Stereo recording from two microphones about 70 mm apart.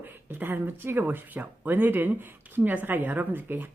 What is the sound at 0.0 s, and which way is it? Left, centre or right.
A woman's voice, right.